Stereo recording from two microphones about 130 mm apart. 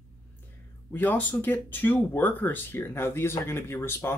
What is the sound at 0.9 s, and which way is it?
Speech, 15° left (ahead or behind).